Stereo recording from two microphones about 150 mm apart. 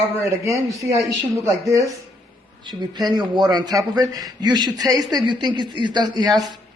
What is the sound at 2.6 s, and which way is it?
A man's voice, 30° right (ahead or behind).